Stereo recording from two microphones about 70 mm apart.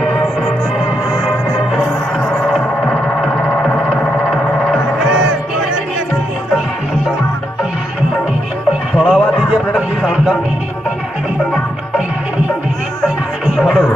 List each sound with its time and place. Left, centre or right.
0.0 s music: centre
3.4 s music: centre
4.3 s music: centre
8.9 s music: centre
9.5 s a sound: centre
13.5 s music: centre